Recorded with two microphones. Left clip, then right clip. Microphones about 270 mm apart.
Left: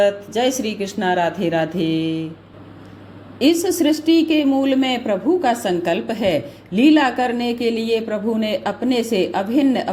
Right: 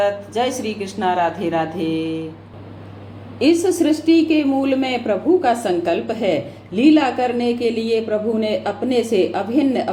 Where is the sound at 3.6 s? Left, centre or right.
Left.